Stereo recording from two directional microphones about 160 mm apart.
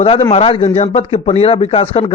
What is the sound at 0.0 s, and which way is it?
Speech, 35° left (ahead or behind).